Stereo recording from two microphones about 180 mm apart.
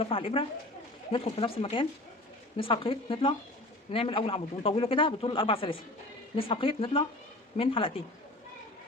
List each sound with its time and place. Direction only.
0.0 s speech: 30° left (ahead or behind)